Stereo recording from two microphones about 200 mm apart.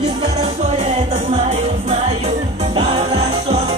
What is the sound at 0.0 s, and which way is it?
Music, 35° right (ahead or behind).